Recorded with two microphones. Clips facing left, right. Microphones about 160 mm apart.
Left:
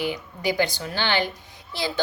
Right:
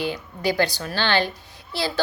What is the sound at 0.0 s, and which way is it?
A woman's voice, 15° left (ahead or behind).